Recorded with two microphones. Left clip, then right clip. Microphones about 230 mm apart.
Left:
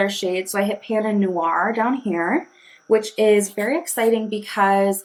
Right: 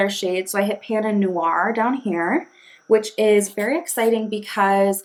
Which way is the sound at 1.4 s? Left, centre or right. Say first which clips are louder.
Even; right.